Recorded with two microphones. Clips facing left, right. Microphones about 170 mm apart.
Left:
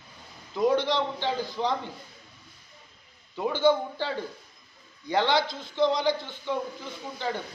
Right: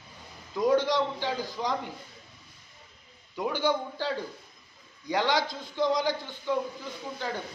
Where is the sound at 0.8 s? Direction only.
10° right (ahead or behind).